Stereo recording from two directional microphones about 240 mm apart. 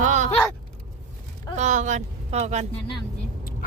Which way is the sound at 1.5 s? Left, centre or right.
Right.